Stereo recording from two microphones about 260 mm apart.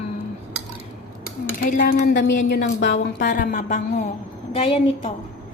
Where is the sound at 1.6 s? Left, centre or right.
Left.